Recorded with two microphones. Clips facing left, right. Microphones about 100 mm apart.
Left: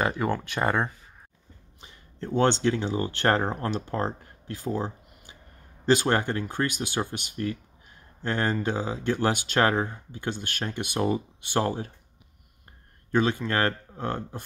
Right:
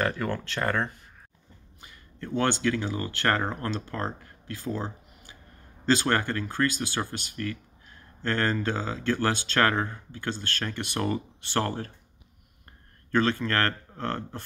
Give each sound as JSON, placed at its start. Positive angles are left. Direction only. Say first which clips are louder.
{"t": 0.0, "sound": "speech", "louder": "left 2 dB", "side_deg": 15}
{"t": 4.7, "sound": "a sound", "louder": "left 3 dB", "side_deg": 15}
{"t": 5.9, "sound": "speech", "louder": "left 2 dB", "side_deg": 15}
{"t": 13.1, "sound": "speech", "louder": "even", "side_deg": 15}